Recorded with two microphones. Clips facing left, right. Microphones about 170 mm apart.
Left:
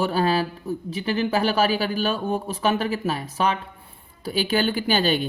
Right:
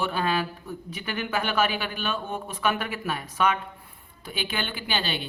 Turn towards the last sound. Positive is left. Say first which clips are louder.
# left 9 dB
turn(degrees=45)  # may be behind; listen again after turning